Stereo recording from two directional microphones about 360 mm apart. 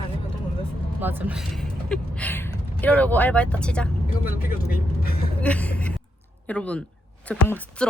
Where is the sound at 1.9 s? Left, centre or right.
Centre.